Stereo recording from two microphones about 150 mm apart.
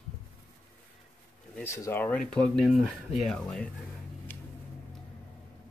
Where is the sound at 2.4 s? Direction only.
Centre (ahead or behind).